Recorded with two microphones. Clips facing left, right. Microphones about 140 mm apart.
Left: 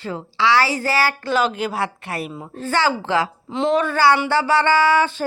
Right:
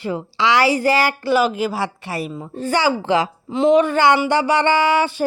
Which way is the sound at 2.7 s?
15° right (ahead or behind).